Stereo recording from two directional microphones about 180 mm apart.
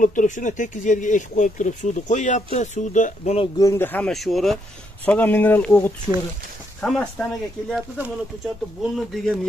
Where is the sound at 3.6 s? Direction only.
15° left (ahead or behind).